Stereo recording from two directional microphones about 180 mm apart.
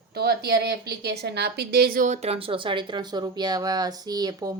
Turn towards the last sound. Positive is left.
turn(degrees=-20)  # may be behind; listen again after turning